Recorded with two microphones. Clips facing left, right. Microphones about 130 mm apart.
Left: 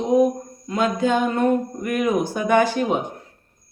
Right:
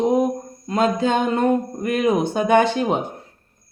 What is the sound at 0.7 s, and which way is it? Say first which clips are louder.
Speech: right 2 dB; 30° right (ahead or behind).